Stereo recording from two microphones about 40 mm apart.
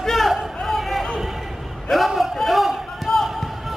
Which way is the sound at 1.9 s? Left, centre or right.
Centre.